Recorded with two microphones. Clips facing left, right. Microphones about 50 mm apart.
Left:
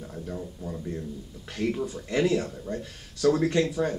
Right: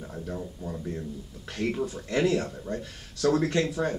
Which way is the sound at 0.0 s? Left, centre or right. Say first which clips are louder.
Even; centre.